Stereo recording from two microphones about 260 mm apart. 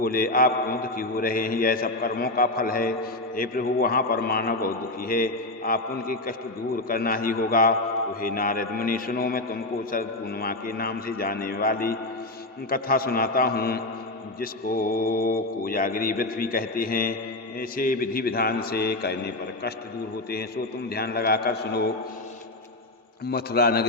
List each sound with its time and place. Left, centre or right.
0.0 s a man's voice: left
20.9 s a man's voice: left
23.2 s a man's voice: left